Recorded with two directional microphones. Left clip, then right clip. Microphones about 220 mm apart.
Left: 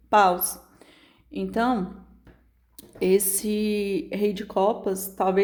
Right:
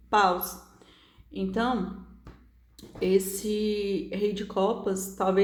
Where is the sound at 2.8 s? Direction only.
50° left (ahead or behind).